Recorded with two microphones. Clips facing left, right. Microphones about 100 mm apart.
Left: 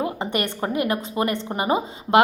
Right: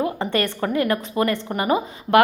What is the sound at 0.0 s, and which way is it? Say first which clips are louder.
A woman's voice: right 2 dB; 20° left (ahead or behind).